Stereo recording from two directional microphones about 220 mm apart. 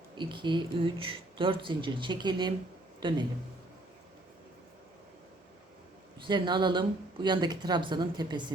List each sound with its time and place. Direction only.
0.2 s speech: 20° right (ahead or behind)
6.2 s speech: 20° right (ahead or behind)